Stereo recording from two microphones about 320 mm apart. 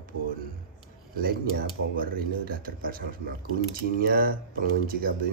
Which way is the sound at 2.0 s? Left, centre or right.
Right.